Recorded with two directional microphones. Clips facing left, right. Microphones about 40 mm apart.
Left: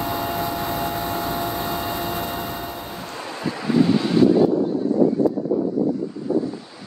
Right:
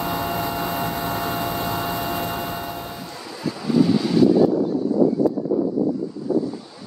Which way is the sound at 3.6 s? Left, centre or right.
Left.